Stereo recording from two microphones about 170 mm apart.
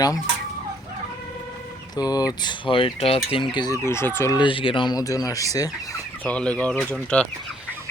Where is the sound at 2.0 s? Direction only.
25° left (ahead or behind).